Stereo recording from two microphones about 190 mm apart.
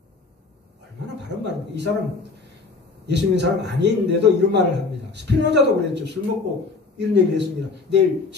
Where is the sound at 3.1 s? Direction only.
65° right (ahead or behind).